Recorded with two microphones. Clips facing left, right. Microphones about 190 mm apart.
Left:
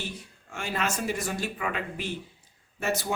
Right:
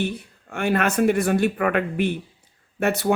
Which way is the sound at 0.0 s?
60° right (ahead or behind).